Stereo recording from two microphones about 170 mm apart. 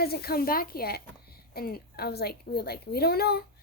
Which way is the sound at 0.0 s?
65° left (ahead or behind).